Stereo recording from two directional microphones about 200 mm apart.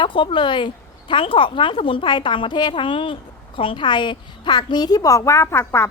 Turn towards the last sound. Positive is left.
turn(degrees=15)  # may be behind; listen again after turning